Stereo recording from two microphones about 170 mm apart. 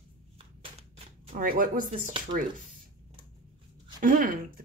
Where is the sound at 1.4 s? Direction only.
55° right (ahead or behind).